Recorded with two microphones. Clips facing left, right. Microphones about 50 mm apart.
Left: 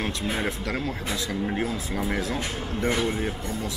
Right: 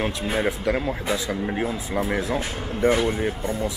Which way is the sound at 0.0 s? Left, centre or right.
Centre.